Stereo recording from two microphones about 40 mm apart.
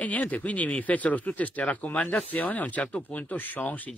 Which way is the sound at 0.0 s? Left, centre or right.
Left.